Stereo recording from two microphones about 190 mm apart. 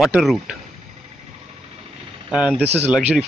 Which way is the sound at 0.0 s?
Centre (ahead or behind).